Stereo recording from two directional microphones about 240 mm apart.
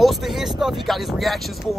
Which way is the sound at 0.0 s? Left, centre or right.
Centre.